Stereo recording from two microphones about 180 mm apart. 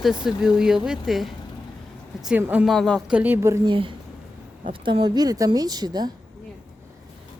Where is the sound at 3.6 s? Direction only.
30° right (ahead or behind).